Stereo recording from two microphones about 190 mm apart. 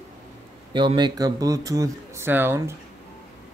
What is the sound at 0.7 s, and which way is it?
Speech, 25° right (ahead or behind).